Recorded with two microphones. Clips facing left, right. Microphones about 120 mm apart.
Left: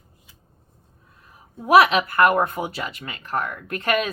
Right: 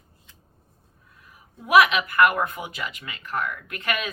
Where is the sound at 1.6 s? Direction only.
35° left (ahead or behind).